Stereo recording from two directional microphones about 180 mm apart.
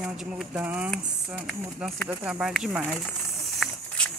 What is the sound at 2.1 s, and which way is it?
Speech, 10° right (ahead or behind).